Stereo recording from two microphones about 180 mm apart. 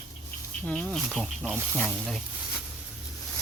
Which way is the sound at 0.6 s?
5° left (ahead or behind).